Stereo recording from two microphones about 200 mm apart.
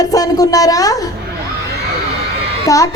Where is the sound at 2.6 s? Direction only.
15° left (ahead or behind).